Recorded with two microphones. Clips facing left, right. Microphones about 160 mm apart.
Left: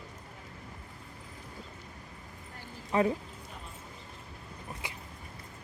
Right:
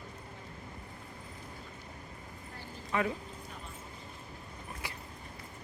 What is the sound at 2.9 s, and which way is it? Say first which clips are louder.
Speech: left 5 dB; 35° left (ahead or behind).